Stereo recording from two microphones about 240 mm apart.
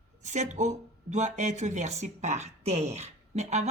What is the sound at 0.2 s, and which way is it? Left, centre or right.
Speech, right.